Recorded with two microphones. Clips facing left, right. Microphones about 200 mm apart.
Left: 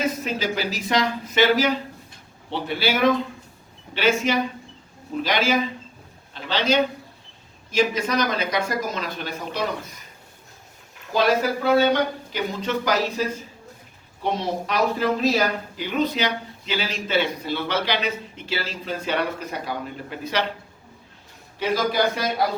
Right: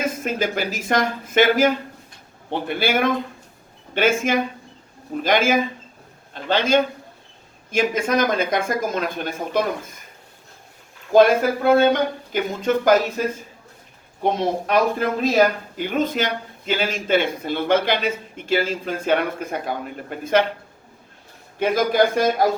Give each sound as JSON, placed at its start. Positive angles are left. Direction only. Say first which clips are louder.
{"t": 0.0, "sound": "a man's voice", "louder": "right 2 dB", "side_deg": -50}
{"t": 11.1, "sound": "a man's voice", "louder": "right 6 dB", "side_deg": -50}
{"t": 21.6, "sound": "a man's voice", "louder": "right 4 dB", "side_deg": -50}